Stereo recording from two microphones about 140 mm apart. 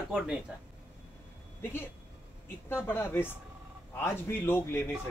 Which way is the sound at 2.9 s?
15° left (ahead or behind).